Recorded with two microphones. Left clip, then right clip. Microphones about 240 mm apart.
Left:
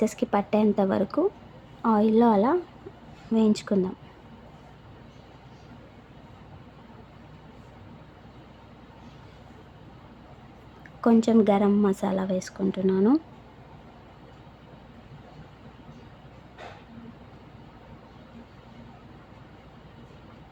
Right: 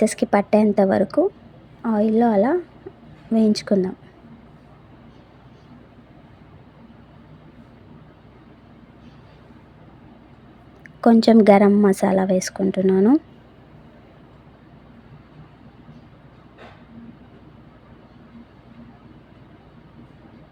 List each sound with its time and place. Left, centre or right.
0.0 s a woman's voice: centre
10.8 s a woman's voice: centre